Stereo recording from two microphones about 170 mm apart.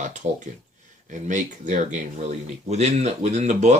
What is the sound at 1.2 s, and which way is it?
Speech, 45° right (ahead or behind).